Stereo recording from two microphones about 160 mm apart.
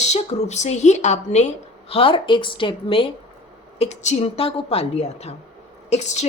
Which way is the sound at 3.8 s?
45° left (ahead or behind).